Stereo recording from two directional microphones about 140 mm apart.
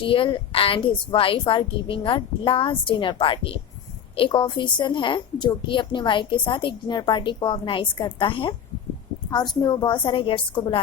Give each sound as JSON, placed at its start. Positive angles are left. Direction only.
{"t": 0.0, "sound": "a woman's voice", "side_deg": 40}
{"t": 9.6, "sound": "a woman's voice", "side_deg": 35}